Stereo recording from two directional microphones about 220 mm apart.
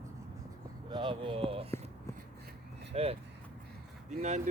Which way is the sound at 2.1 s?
15° left (ahead or behind).